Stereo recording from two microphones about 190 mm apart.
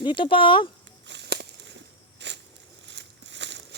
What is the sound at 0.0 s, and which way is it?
Speech, 25° left (ahead or behind).